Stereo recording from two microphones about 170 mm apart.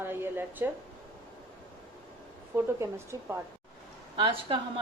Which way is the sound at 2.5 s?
15° right (ahead or behind).